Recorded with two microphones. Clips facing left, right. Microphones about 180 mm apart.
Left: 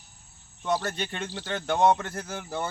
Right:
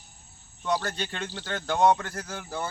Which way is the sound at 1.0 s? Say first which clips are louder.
Left 1 dB; 15° left (ahead or behind).